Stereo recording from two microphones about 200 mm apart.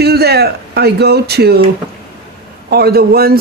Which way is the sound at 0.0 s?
55° right (ahead or behind).